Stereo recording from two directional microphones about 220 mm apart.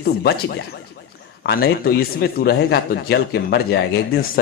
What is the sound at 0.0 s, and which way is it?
A man's voice, 45° left (ahead or behind).